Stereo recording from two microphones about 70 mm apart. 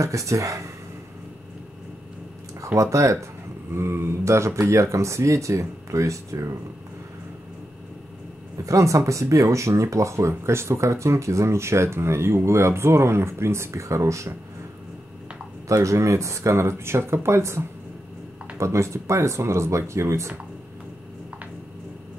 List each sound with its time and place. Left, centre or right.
0.0 s speech: right
2.6 s speech: right
8.6 s speech: right
15.7 s speech: right